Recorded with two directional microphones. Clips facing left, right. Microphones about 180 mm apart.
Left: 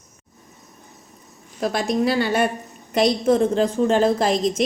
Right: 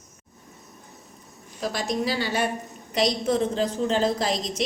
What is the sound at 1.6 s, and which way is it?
A woman's voice, 60° left (ahead or behind).